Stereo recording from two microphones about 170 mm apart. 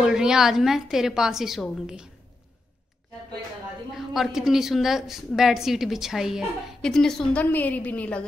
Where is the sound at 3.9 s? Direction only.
Centre (ahead or behind).